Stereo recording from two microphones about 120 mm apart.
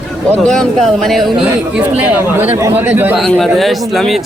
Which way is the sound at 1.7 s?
15° right (ahead or behind).